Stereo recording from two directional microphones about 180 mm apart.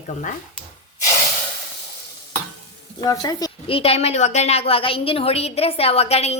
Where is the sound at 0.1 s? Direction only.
45° left (ahead or behind).